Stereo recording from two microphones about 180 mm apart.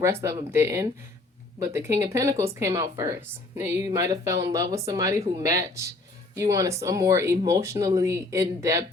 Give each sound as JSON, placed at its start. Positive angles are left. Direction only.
{"t": 0.0, "sound": "speech", "side_deg": -15}